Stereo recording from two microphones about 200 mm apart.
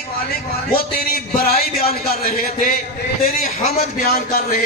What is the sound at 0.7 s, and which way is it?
A man's voice, 50° left (ahead or behind).